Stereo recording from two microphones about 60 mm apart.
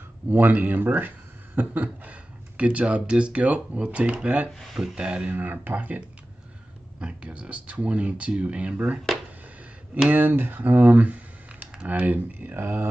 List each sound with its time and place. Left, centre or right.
0.3 s speech: right
5.3 s speech: right
7.0 s speech: centre
10.0 s speech: right